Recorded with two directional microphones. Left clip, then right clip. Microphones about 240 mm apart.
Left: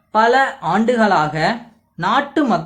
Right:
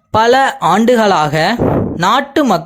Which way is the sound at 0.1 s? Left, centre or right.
Right.